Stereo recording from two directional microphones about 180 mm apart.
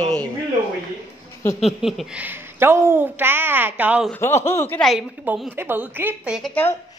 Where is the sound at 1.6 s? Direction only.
Centre (ahead or behind).